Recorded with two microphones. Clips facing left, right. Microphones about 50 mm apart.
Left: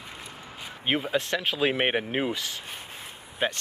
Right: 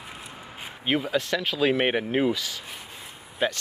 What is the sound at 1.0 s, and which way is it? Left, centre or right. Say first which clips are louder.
Speech: right 1 dB; left.